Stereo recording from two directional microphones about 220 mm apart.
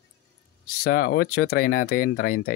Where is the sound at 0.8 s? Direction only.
45° left (ahead or behind).